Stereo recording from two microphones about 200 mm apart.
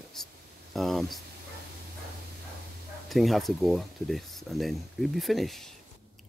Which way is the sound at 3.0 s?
Centre (ahead or behind).